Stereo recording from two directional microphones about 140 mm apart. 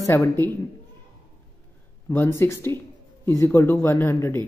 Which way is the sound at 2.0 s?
20° left (ahead or behind).